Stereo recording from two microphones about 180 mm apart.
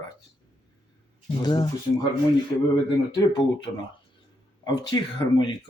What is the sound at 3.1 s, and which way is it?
Speech, 25° left (ahead or behind).